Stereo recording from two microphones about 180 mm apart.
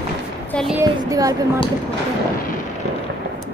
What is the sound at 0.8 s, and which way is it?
Speech, 20° right (ahead or behind).